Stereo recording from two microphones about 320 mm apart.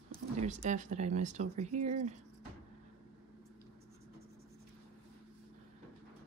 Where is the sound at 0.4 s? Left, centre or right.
Right.